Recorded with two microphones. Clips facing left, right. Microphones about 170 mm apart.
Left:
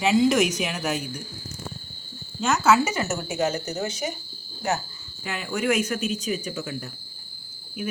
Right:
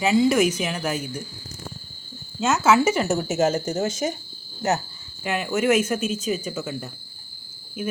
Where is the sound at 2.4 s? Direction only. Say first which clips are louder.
Right 2 dB; 10° right (ahead or behind).